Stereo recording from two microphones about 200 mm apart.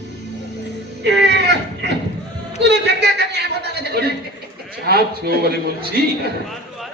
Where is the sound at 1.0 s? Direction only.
55° right (ahead or behind).